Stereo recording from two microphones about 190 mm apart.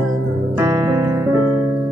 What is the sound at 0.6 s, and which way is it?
Music, 20° right (ahead or behind).